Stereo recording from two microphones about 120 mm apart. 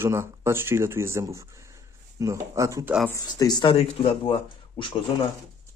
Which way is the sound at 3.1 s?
35° left (ahead or behind).